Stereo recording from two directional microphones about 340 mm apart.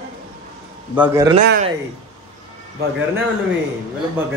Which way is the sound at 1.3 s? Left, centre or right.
Right.